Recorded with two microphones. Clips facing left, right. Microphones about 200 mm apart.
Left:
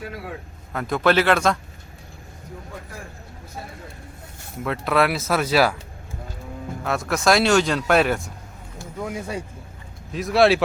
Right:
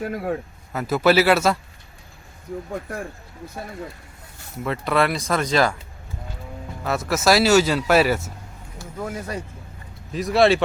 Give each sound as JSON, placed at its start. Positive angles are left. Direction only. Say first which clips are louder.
{"t": 0.0, "sound": "speech", "louder": "right 8 dB", "side_deg": -50}
{"t": 0.7, "sound": "speech", "louder": "right 2 dB", "side_deg": -5}
{"t": 4.6, "sound": "speech", "louder": "even", "side_deg": 0}
{"t": 6.8, "sound": "speech", "louder": "right 1 dB", "side_deg": 0}
{"t": 9.0, "sound": "speech", "louder": "even", "side_deg": 10}